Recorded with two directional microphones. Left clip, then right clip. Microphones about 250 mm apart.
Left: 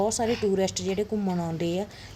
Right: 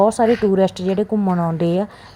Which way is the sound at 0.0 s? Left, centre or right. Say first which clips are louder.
Right 11 dB; centre.